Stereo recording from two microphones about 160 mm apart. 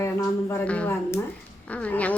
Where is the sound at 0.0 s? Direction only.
15° left (ahead or behind).